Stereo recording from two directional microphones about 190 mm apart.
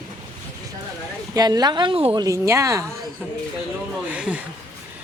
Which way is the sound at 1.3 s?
20° right (ahead or behind).